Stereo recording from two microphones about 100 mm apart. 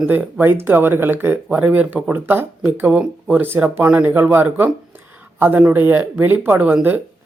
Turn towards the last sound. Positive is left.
turn(degrees=-15)  # may be behind; listen again after turning